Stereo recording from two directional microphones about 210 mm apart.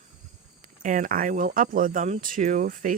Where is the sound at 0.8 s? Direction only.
40° right (ahead or behind).